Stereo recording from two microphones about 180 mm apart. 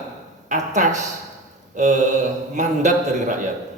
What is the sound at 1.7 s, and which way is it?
A man's voice, 40° right (ahead or behind).